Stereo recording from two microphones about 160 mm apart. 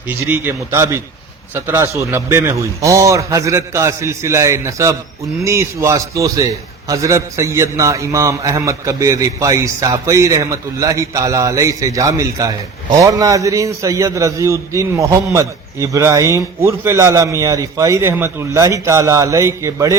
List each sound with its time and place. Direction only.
0.1 s a man's voice: 10° right (ahead or behind)